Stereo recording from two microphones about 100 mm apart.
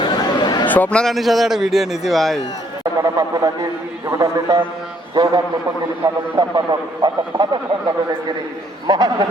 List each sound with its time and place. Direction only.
0.0 s chatter: 45° left (ahead or behind)
0.7 s a man's voice: 15° left (ahead or behind)
1.1 s a man's voice: centre (ahead or behind)
3.0 s a man's voice: 35° right (ahead or behind)